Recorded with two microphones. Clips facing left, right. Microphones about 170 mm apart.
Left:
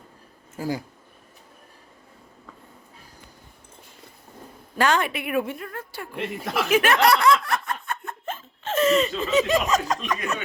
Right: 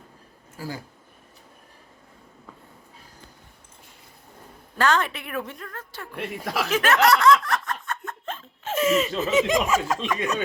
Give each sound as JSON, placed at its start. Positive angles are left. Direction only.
{"t": 0.5, "sound": "speech", "side_deg": 20}
{"t": 4.8, "sound": "a woman's voice", "side_deg": 10}
{"t": 6.1, "sound": "speech", "side_deg": 0}
{"t": 6.7, "sound": "a woman's voice", "side_deg": 15}
{"t": 7.4, "sound": "a sound", "side_deg": 10}
{"t": 8.6, "sound": "speech", "side_deg": -10}